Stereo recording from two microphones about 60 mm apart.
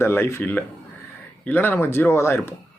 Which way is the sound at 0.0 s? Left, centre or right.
Left.